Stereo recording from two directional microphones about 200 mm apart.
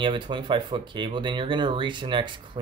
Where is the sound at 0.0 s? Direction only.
25° right (ahead or behind).